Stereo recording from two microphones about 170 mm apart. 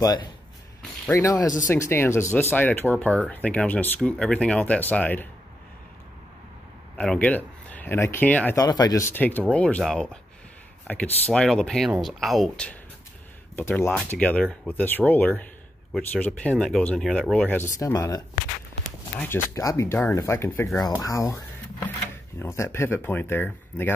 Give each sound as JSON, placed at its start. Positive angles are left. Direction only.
{"t": 0.0, "sound": "speech", "side_deg": 25}
{"t": 7.0, "sound": "speech", "side_deg": 5}
{"t": 8.5, "sound": "speech", "side_deg": 20}